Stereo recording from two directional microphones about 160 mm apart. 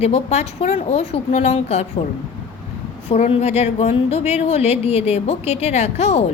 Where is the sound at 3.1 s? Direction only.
40° left (ahead or behind).